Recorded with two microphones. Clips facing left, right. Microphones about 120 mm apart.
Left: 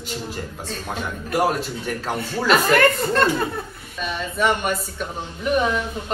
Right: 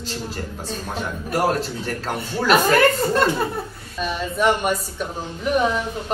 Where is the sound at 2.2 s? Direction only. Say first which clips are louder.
Right 2 dB; 5° right (ahead or behind).